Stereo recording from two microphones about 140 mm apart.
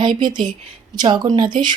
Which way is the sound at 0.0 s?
35° right (ahead or behind).